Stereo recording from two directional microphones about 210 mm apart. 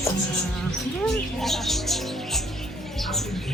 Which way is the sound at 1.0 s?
Centre (ahead or behind).